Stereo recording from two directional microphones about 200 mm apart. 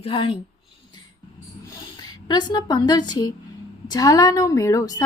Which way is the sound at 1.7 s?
20° left (ahead or behind).